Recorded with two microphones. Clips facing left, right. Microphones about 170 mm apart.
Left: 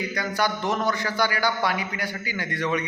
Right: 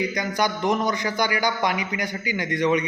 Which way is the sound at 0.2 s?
15° right (ahead or behind).